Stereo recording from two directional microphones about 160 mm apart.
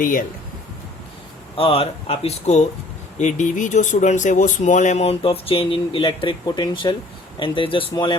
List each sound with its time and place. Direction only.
0.0 s speech: 60° left (ahead or behind)
1.5 s speech: 35° left (ahead or behind)